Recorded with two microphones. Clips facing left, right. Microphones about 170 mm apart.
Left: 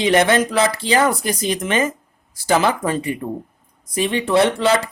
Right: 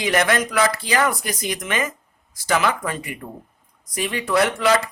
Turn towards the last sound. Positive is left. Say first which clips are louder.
# left 3 dB
turn(degrees=30)  # may be behind; listen again after turning